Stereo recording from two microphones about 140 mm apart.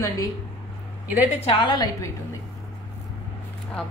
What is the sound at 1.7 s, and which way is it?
Speech, 30° left (ahead or behind).